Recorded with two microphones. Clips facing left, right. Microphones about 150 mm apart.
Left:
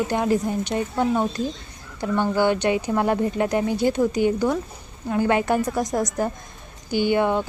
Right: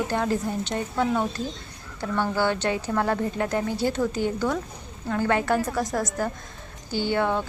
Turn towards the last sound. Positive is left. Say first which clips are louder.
# left 4 dB
turn(degrees=15)  # may be behind; listen again after turning